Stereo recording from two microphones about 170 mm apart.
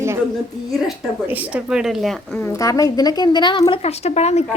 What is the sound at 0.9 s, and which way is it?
Speech, 10° right (ahead or behind).